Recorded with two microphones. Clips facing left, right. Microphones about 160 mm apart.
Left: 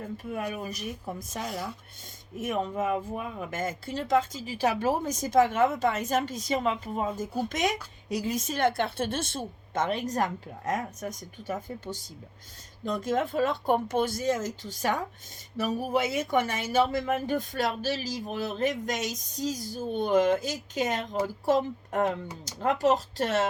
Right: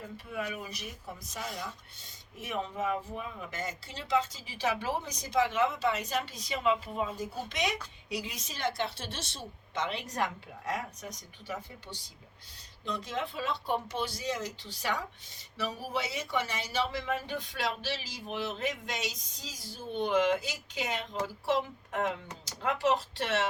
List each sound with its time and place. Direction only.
0.0 s speech: 50° left (ahead or behind)